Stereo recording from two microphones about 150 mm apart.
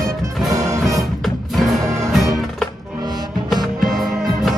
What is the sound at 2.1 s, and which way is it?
Music, centre (ahead or behind).